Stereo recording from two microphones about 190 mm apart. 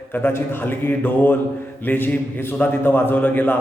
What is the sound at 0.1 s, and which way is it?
A man's voice, 10° left (ahead or behind).